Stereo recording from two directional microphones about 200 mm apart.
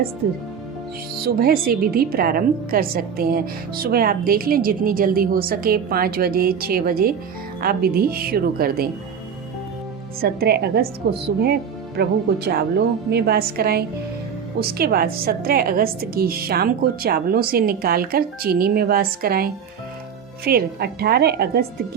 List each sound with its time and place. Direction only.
1.2 s a woman's voice: 50° right (ahead or behind)
10.2 s a woman's voice: 50° right (ahead or behind)